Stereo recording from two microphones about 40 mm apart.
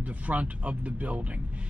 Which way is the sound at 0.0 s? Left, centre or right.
Right.